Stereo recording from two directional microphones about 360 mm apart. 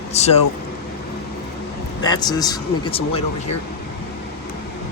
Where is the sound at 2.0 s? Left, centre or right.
Centre.